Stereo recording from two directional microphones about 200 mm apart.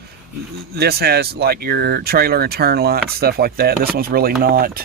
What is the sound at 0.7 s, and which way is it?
Speech, 50° right (ahead or behind).